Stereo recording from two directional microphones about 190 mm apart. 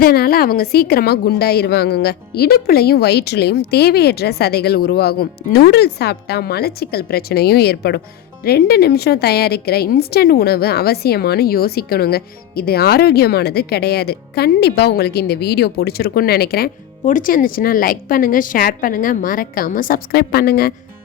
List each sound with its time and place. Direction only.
0.0 s a woman's voice: 55° left (ahead or behind)